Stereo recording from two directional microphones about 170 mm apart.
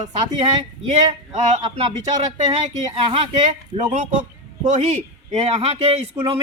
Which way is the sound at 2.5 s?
35° right (ahead or behind).